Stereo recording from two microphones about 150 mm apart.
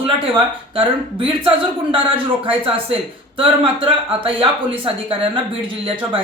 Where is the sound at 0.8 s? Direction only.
35° right (ahead or behind).